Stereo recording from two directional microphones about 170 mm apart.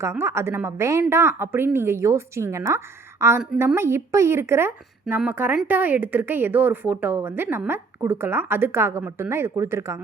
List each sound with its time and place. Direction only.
0.0 s speech: 15° right (ahead or behind)